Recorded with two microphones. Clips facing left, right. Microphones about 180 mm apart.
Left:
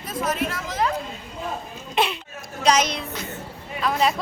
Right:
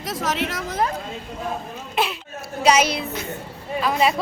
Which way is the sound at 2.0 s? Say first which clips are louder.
Left 1 dB; 5° right (ahead or behind).